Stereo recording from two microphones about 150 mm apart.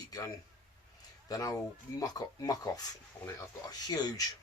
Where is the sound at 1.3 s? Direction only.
25° left (ahead or behind).